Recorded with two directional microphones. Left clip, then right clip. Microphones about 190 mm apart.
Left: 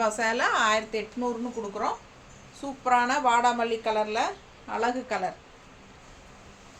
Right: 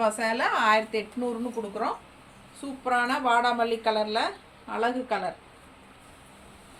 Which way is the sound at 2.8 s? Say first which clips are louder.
Left 2 dB; 20° left (ahead or behind).